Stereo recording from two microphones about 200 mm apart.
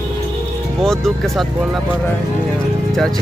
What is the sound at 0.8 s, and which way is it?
Speech, centre (ahead or behind).